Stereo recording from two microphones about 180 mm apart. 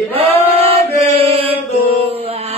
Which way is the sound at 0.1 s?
35° right (ahead or behind).